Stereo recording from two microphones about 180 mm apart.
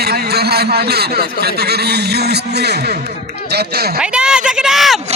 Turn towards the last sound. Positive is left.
turn(degrees=0)  # may be behind; listen again after turning